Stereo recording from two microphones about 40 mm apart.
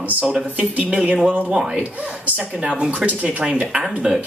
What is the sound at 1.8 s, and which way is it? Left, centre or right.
Speech, right.